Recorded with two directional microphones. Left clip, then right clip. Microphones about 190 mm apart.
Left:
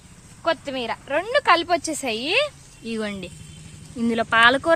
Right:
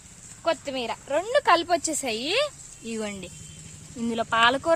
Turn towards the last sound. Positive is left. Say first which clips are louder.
# left 5 dB
turn(degrees=0)  # may be behind; listen again after turning